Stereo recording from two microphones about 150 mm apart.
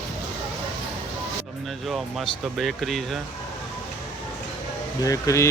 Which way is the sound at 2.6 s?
Centre (ahead or behind).